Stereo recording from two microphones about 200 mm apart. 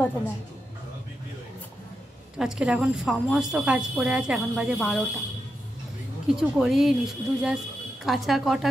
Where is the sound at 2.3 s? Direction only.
5° right (ahead or behind).